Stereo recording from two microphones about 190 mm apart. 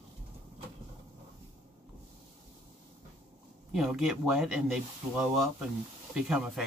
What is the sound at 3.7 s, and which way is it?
Speech, centre (ahead or behind).